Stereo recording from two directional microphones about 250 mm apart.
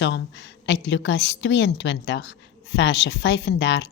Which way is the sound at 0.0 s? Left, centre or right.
Left.